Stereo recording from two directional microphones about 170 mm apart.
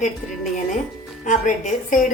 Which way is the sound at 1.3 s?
50° left (ahead or behind).